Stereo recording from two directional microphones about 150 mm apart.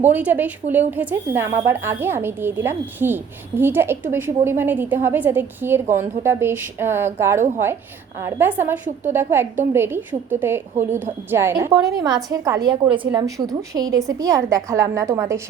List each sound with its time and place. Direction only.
0.0 s a woman's voice: 10° right (ahead or behind)
11.5 s a woman's voice: 25° right (ahead or behind)